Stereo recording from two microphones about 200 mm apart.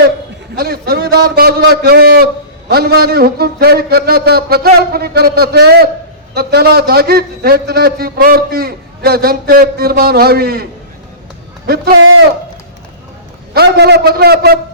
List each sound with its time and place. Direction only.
0.5 s a man's voice: 50° right (ahead or behind)
11.9 s a man's voice: 85° right
13.5 s a man's voice: 55° right (ahead or behind)